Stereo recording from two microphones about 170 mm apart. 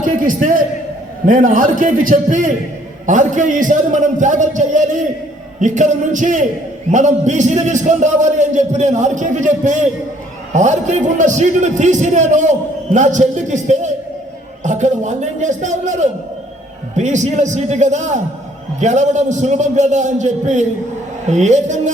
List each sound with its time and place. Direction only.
0.0 s a man's voice: 50° right (ahead or behind)